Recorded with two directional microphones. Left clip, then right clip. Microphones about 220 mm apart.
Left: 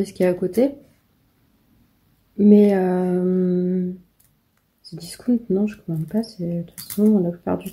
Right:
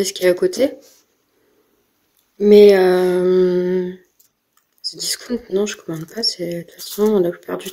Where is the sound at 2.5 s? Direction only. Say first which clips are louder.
Right 8 dB; 40° right (ahead or behind).